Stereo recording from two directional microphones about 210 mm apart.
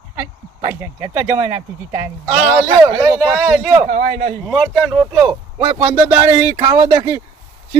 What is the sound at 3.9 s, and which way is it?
Speech, 35° right (ahead or behind).